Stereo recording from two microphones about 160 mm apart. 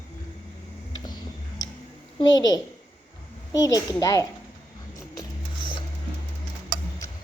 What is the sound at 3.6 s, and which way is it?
Speech, 20° left (ahead or behind).